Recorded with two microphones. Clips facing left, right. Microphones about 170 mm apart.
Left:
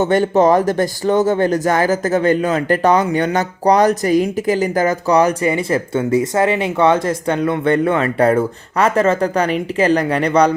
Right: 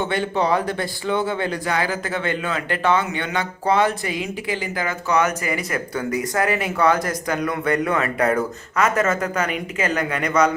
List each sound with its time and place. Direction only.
0.0 s speech: 45° left (ahead or behind)